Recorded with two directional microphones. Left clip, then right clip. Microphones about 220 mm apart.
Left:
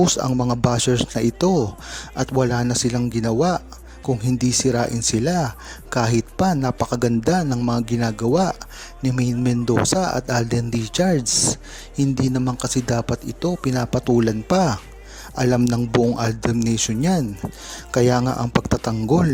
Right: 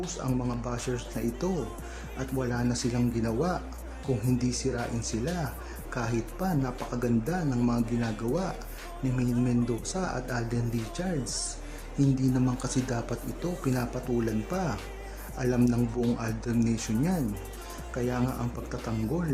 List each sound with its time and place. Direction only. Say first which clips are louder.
0.2 s speech: left 12 dB; 40° left (ahead or behind)